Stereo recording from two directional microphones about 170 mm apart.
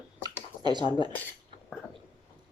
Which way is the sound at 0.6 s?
25° right (ahead or behind).